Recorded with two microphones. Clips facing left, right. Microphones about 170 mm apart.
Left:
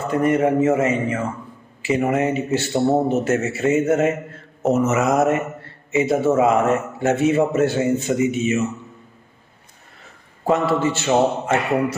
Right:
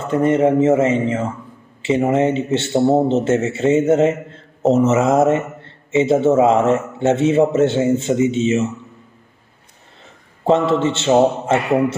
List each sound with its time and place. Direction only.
0.0 s a man's voice: 25° right (ahead or behind)
10.4 s a man's voice: 25° right (ahead or behind)